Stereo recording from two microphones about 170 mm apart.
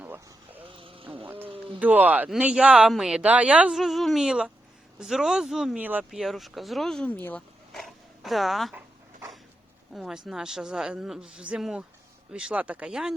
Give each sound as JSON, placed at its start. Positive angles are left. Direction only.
{"t": 0.0, "sound": "vehicle", "side_deg": -10}
{"t": 0.6, "sound": "a sound", "side_deg": -30}
{"t": 1.8, "sound": "speech", "side_deg": -10}
{"t": 9.9, "sound": "speech", "side_deg": 0}